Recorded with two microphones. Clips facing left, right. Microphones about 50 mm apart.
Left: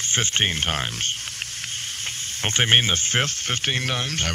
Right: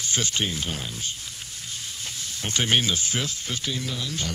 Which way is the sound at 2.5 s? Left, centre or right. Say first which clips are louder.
Left 3 dB; left.